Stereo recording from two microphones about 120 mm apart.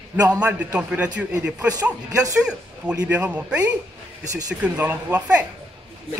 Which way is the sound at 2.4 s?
10° right (ahead or behind).